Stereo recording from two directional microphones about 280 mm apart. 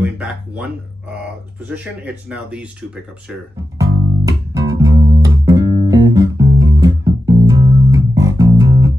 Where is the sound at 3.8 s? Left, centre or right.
Centre.